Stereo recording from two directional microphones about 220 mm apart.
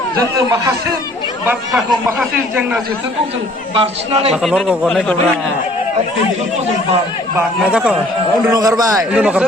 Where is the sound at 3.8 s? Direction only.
25° right (ahead or behind).